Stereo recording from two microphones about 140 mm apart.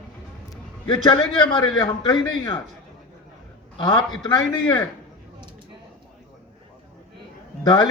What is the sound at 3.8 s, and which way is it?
Speech, 30° left (ahead or behind).